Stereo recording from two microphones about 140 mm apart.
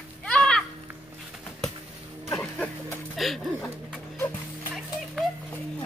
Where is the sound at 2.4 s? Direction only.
10° left (ahead or behind).